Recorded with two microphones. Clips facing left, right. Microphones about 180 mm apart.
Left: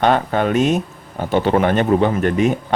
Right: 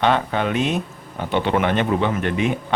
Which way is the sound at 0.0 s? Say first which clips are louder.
Left 3 dB; 45° left (ahead or behind).